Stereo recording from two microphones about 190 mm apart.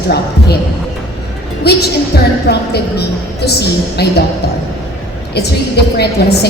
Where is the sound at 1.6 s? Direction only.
60° left (ahead or behind).